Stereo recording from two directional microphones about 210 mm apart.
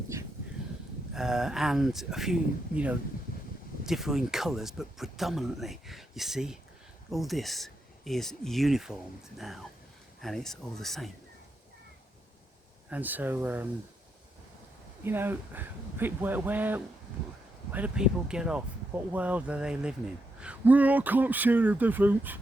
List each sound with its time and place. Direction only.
1.1 s speech: centre (ahead or behind)
10.2 s speech: centre (ahead or behind)
12.9 s speech: 10° right (ahead or behind)
15.0 s speech: 10° right (ahead or behind)